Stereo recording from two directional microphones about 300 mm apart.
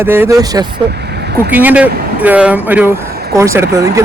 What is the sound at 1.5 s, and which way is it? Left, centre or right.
Speech, centre.